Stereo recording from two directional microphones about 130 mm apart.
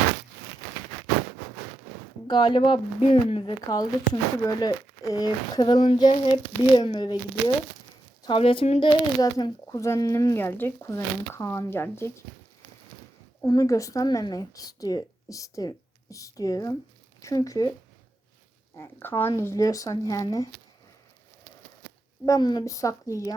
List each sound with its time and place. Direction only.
2.2 s speech: 35° left (ahead or behind)
4.1 s speech: 30° left (ahead or behind)
8.4 s speech: 45° left (ahead or behind)
9.2 s speech: 30° left (ahead or behind)
13.4 s speech: 25° left (ahead or behind)
18.8 s speech: 15° left (ahead or behind)
22.3 s speech: 35° left (ahead or behind)